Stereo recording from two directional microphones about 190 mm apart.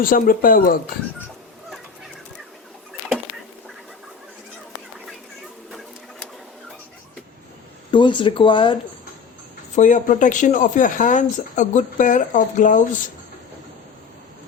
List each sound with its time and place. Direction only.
0.0 s speech: 50° left (ahead or behind)
7.9 s speech: 25° left (ahead or behind)
9.7 s speech: 40° left (ahead or behind)